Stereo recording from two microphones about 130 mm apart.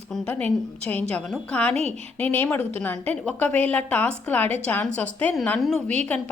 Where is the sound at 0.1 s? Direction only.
10° left (ahead or behind).